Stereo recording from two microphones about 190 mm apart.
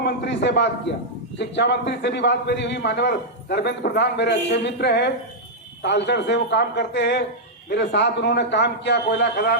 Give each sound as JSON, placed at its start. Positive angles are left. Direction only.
{"t": 0.0, "sound": "a man's voice", "side_deg": 65}